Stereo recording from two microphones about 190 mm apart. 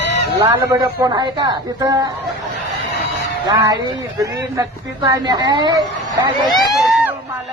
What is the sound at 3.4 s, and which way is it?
Speech, 20° right (ahead or behind).